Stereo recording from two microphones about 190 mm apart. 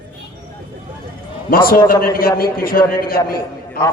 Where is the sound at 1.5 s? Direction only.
50° left (ahead or behind).